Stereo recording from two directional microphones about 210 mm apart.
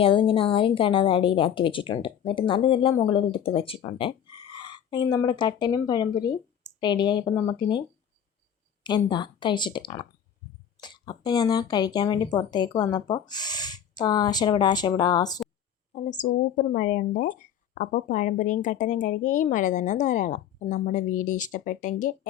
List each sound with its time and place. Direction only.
0.0 s a woman's voice: 25° left (ahead or behind)
15.9 s speech: 35° left (ahead or behind)